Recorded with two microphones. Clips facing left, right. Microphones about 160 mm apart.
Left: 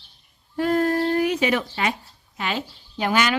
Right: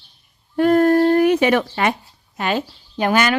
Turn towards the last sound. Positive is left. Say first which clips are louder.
# right 4 dB
turn(degrees=-50)  # may be behind; listen again after turning